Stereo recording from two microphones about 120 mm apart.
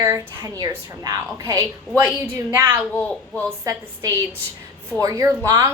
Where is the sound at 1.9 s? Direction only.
20° right (ahead or behind).